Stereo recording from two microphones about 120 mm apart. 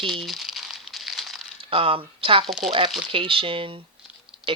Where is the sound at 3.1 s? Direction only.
45° right (ahead or behind).